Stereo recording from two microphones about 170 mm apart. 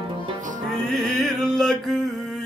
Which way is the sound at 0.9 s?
Centre (ahead or behind).